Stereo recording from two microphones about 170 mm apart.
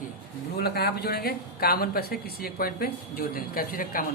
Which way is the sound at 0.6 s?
70° left (ahead or behind).